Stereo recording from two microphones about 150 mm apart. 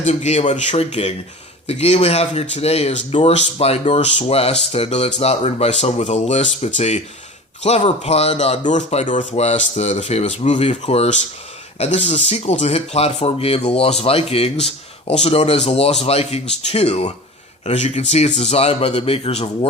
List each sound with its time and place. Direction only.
0.0 s speech: 50° left (ahead or behind)